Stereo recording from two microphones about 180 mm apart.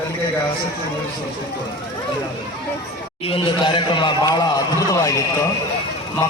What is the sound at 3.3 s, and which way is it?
Speech, 30° left (ahead or behind).